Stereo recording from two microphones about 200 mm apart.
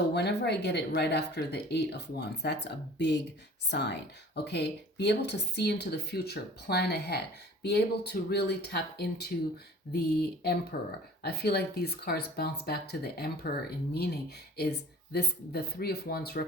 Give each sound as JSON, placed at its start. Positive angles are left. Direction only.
{"t": 0.1, "sound": "speech", "side_deg": 55}